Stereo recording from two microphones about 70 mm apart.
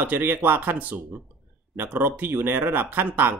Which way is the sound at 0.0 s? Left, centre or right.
Right.